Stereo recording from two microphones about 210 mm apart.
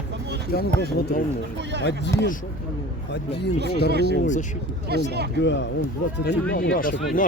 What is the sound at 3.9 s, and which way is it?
Speech, 50° right (ahead or behind).